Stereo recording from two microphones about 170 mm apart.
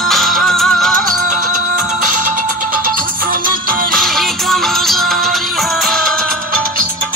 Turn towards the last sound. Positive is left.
turn(degrees=0)  # may be behind; listen again after turning